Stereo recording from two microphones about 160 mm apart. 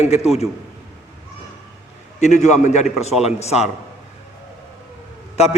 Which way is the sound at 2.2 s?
45° left (ahead or behind).